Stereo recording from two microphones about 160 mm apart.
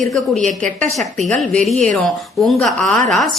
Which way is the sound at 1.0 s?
Centre (ahead or behind).